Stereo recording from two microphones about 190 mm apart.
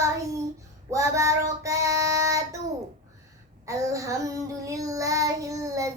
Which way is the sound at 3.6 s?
15° right (ahead or behind).